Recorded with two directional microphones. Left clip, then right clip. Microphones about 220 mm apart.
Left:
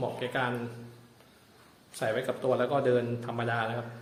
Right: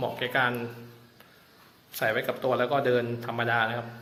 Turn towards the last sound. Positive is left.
turn(degrees=0)  # may be behind; listen again after turning